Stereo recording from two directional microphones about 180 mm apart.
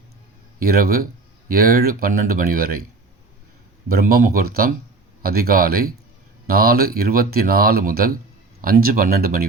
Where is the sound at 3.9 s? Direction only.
55° right (ahead or behind).